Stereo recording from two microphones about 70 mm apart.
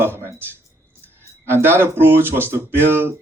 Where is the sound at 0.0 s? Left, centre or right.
Right.